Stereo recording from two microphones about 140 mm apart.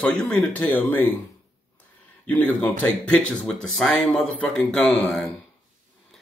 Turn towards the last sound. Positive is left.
turn(degrees=0)  # may be behind; listen again after turning